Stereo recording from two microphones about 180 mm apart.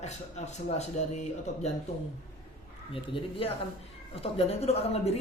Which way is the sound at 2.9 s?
30° left (ahead or behind).